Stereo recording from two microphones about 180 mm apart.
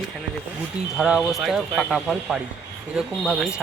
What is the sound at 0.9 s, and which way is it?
Speech, 5° right (ahead or behind).